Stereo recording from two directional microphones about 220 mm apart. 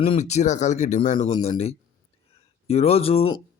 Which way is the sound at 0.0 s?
30° left (ahead or behind).